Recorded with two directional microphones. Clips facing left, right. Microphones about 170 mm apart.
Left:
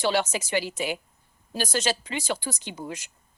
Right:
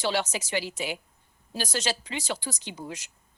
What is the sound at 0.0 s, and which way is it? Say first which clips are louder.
A woman's voice: left 3 dB; 50° left (ahead or behind).